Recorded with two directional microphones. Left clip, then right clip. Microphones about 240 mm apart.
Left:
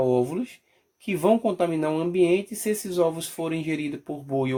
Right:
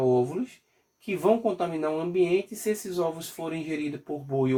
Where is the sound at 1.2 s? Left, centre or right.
Left.